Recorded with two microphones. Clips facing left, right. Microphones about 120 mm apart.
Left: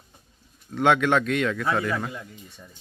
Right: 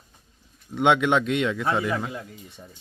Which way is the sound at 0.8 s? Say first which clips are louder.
Even; 20° right (ahead or behind).